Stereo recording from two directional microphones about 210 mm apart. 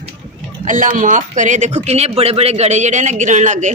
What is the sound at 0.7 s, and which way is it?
Speech, 40° right (ahead or behind).